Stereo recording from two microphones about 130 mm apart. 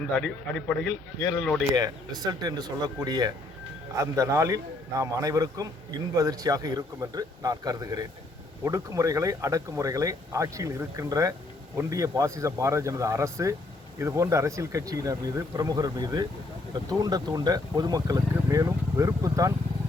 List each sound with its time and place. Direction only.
0.7 s speech: 15° left (ahead or behind)
1.7 s speech: 30° right (ahead or behind)